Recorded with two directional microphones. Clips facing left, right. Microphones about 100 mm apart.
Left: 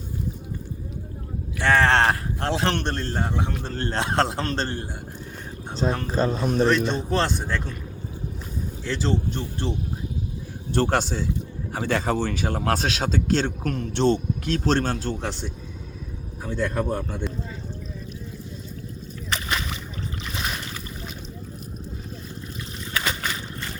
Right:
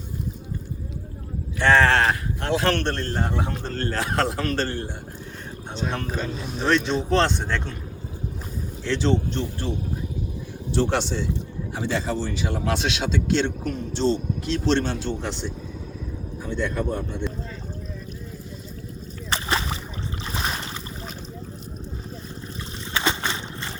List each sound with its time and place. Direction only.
1.8 s speech: 30° left (ahead or behind)
2.6 s a man's voice: 20° left (ahead or behind)
5.7 s speech: 35° left (ahead or behind)
7.1 s speech: 5° left (ahead or behind)
8.8 s speech: 5° left (ahead or behind)
10.8 s speech: 45° left (ahead or behind)
11.7 s speech: 55° left (ahead or behind)
13.7 s speech: 60° left (ahead or behind)
16.5 s speech: 45° left (ahead or behind)
19.3 s a sound: 30° right (ahead or behind)
20.3 s boat: 35° right (ahead or behind)
23.0 s boat: 25° right (ahead or behind)